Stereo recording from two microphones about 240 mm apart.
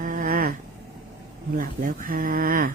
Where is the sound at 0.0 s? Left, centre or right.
Right.